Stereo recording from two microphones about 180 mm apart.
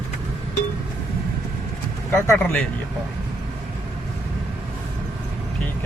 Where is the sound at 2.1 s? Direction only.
10° left (ahead or behind).